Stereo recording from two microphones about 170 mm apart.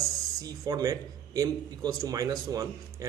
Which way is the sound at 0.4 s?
20° right (ahead or behind).